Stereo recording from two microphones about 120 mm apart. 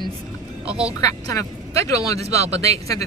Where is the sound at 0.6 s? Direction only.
10° right (ahead or behind).